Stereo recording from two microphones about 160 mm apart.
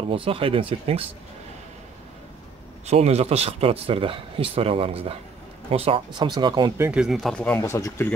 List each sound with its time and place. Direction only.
0.1 s speech: 35° right (ahead or behind)
2.9 s speech: 40° right (ahead or behind)
6.8 s speech: 5° right (ahead or behind)
7.4 s speech: 15° left (ahead or behind)